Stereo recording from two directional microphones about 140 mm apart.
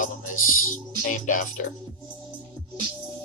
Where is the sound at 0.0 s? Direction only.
70° left (ahead or behind).